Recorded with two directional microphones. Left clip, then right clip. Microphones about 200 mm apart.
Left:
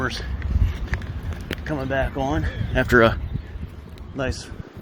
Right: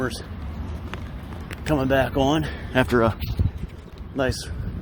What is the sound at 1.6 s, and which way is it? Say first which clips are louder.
Speech: right 4 dB; 40° right (ahead or behind).